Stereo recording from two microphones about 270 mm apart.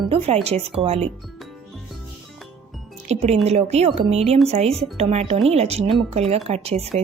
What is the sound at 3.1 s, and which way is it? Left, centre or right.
Speech, right.